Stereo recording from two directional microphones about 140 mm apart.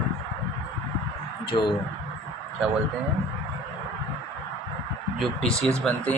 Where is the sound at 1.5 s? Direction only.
40° left (ahead or behind).